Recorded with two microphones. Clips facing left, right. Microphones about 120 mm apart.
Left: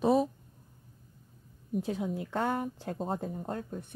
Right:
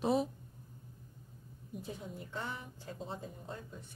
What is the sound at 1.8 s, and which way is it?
Speech, 85° left.